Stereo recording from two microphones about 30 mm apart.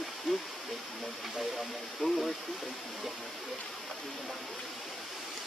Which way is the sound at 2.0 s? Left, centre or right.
Centre.